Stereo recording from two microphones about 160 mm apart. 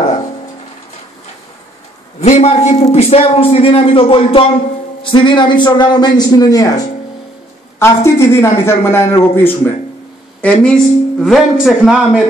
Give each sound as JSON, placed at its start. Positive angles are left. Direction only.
{"t": 2.1, "sound": "a man's voice", "side_deg": 45}
{"t": 7.8, "sound": "a woman's voice", "side_deg": 15}